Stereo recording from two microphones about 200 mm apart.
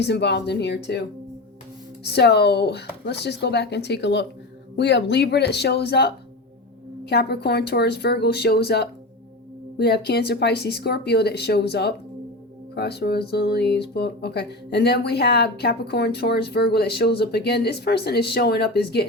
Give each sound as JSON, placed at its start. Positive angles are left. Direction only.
{"t": 0.0, "sound": "speech", "side_deg": 60}
{"t": 2.0, "sound": "speech", "side_deg": 55}